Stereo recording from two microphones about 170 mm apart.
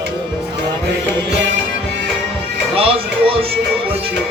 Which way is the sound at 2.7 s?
35° right (ahead or behind).